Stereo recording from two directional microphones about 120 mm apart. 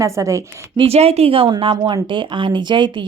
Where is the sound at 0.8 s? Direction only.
55° right (ahead or behind).